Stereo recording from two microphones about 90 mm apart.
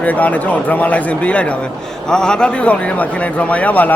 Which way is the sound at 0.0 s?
15° left (ahead or behind).